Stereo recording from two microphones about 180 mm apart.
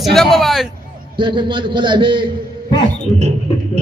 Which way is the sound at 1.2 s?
25° right (ahead or behind).